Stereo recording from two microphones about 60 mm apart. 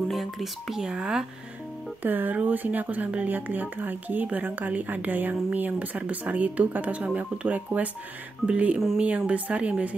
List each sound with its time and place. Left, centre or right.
0.1 s speech: centre
2.0 s speech: right